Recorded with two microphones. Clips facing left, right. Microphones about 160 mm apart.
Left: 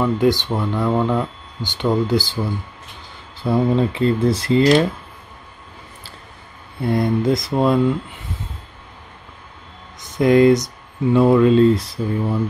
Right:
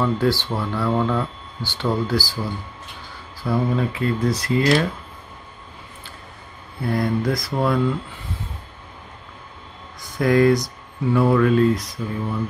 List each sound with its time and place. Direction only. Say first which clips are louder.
0.0 s speech: left 3 dB; 20° left (ahead or behind)
3.4 s speech: left 4 dB; 25° left (ahead or behind)
6.8 s speech: left 3 dB; 25° left (ahead or behind)
10.0 s speech: left 4 dB; 20° left (ahead or behind)